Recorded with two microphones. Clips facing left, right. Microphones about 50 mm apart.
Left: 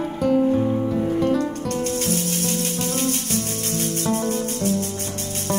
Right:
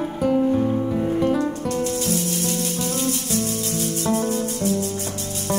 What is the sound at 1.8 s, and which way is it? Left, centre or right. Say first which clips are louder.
Music: even; left.